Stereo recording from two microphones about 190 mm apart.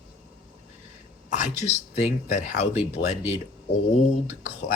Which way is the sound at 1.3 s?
40° left (ahead or behind).